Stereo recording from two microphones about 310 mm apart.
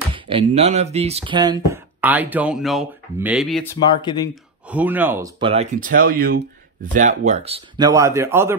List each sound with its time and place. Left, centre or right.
0.1 s speech: centre
3.8 s speech: centre
4.6 s speech: centre